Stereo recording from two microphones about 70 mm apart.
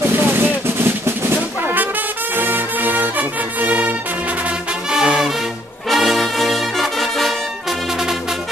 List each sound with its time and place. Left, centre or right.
0.0 s music: right
4.9 s music: centre
5.9 s brass instrument: centre